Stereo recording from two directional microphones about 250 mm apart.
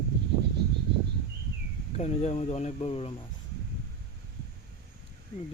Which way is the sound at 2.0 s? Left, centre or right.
Left.